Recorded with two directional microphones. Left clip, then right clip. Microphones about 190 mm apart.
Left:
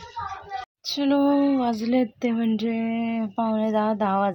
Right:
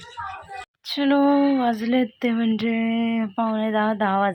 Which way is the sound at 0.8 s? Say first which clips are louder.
Right 2 dB; centre (ahead or behind).